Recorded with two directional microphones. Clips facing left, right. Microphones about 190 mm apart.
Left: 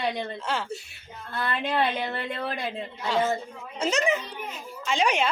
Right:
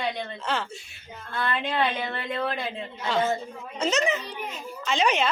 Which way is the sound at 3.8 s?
10° left (ahead or behind).